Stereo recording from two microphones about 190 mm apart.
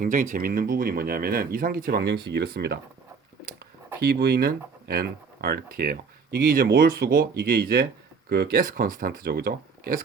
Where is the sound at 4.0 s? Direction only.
55° right (ahead or behind).